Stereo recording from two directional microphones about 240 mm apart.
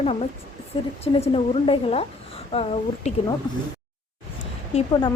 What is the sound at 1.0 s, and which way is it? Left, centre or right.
A woman's voice, left.